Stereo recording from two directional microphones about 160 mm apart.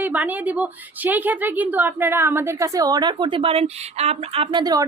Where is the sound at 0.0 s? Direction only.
10° right (ahead or behind).